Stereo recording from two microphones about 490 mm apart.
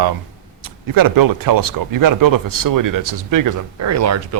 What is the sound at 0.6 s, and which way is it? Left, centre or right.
Speech, right.